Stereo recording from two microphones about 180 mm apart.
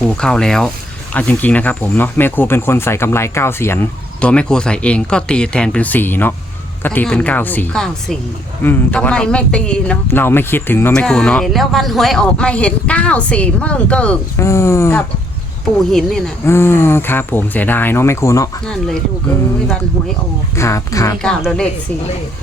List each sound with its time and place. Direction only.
0.0 s speech: 5° left (ahead or behind)
15.9 s speech: centre (ahead or behind)
16.5 s speech: 15° left (ahead or behind)
20.6 s speech: 15° left (ahead or behind)
21.2 s speech: 5° left (ahead or behind)